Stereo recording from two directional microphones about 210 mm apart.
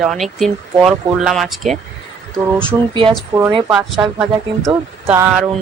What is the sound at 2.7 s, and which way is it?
Speech, 10° right (ahead or behind).